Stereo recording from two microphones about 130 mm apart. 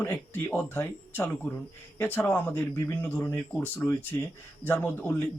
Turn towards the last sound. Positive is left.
turn(degrees=15)  # may be behind; listen again after turning